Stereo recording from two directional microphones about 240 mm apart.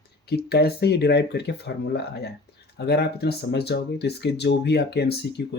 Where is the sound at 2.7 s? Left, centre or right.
Left.